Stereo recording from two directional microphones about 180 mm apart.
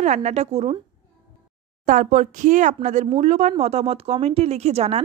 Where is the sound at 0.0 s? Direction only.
40° right (ahead or behind).